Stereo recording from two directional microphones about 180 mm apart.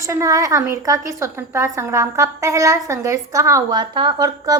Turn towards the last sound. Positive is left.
turn(degrees=-20)  # may be behind; listen again after turning